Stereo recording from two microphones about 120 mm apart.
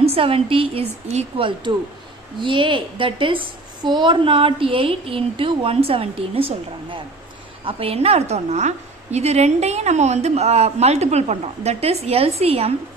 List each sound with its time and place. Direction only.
0.0 s a woman's voice: 55° right (ahead or behind)